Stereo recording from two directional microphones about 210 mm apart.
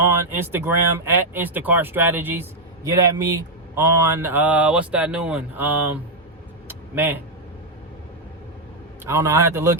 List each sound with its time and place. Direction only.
0.0 s speech: 10° right (ahead or behind)
6.7 s a sound: 10° right (ahead or behind)
9.0 s speech: 10° right (ahead or behind)